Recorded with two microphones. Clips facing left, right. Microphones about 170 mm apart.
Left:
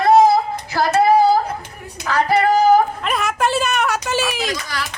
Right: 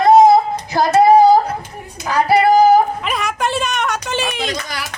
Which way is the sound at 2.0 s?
15° right (ahead or behind).